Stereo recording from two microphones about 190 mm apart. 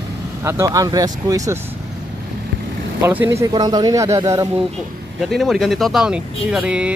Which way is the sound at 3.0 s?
10° right (ahead or behind).